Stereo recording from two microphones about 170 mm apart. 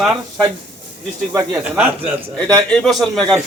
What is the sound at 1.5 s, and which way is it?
Speech, 10° right (ahead or behind).